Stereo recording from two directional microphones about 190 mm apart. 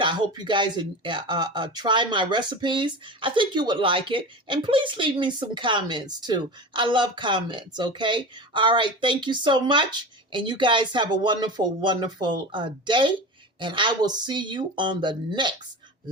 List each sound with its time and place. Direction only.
0.0 s speech: 25° right (ahead or behind)